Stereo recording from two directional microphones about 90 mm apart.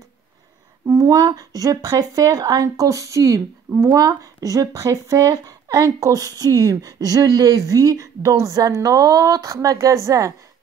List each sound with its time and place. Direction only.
0.8 s speech: 40° right (ahead or behind)